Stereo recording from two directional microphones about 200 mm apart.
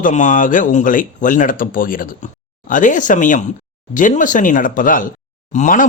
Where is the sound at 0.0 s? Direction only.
40° left (ahead or behind).